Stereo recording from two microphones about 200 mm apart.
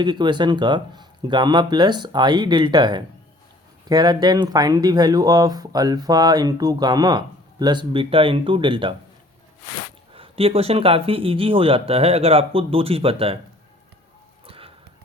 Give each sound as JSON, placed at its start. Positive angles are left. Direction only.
{"t": 0.0, "sound": "speech", "side_deg": -20}
{"t": 10.2, "sound": "speech", "side_deg": -30}
{"t": 14.4, "sound": "a sound", "side_deg": -30}